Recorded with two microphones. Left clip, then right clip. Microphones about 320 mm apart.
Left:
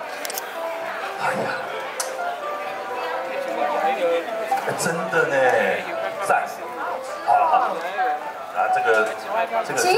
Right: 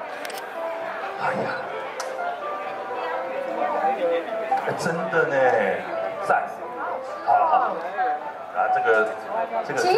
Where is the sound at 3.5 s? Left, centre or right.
Centre.